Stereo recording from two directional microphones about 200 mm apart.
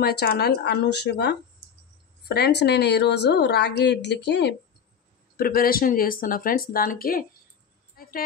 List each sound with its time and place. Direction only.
0.0 s a woman's voice: 50° left (ahead or behind)
5.4 s speech: 45° left (ahead or behind)
7.9 s a sound: 45° left (ahead or behind)